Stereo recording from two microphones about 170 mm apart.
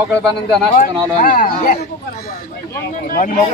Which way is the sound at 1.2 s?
50° left (ahead or behind).